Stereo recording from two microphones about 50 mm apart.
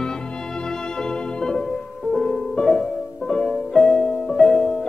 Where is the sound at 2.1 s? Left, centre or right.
Centre.